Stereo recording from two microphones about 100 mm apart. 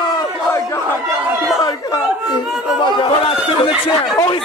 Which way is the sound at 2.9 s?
60° left (ahead or behind).